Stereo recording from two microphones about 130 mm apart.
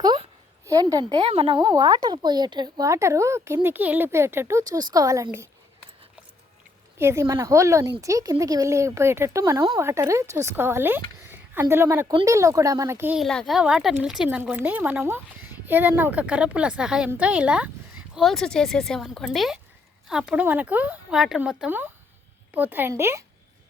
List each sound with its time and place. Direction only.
0.6 s a woman's voice: 25° right (ahead or behind)
1.2 s speech: 45° right (ahead or behind); by 5.5 s 20° right (ahead or behind)
7.0 s speech: 20° right (ahead or behind)
13.1 s speech: 5° left (ahead or behind); by 23.2 s 20° right (ahead or behind)